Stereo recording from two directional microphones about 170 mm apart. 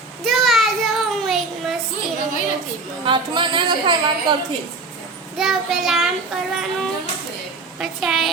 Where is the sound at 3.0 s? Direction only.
30° right (ahead or behind).